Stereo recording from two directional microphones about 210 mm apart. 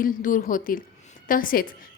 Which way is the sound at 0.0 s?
40° left (ahead or behind).